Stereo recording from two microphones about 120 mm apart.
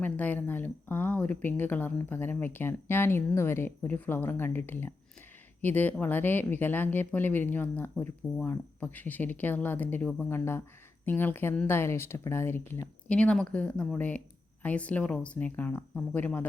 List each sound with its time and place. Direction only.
0.0 s speech: 15° left (ahead or behind)
13.1 s speech: 10° left (ahead or behind)